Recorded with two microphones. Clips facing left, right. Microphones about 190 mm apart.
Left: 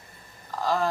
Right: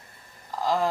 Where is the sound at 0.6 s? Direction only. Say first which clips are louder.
Right 1 dB; 15° right (ahead or behind).